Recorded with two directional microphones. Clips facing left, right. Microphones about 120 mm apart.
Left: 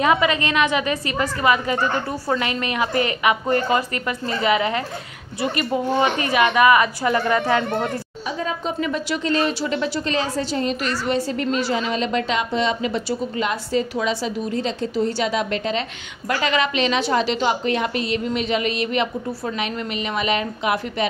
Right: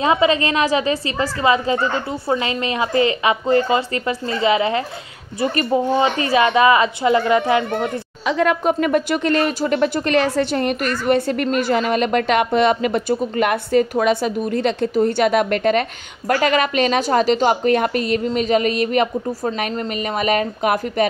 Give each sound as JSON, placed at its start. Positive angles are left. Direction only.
{"t": 0.0, "sound": "a woman's voice", "side_deg": -30}
{"t": 5.4, "sound": "a woman's voice", "side_deg": -40}
{"t": 5.9, "sound": "a woman's voice", "side_deg": -25}
{"t": 8.3, "sound": "speech", "side_deg": -75}
{"t": 16.3, "sound": "a woman's voice", "side_deg": -45}